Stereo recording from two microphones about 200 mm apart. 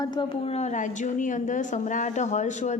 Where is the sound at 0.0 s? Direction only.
20° left (ahead or behind).